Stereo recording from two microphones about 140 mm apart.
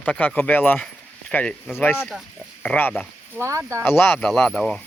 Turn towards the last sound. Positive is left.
turn(degrees=5)  # may be behind; listen again after turning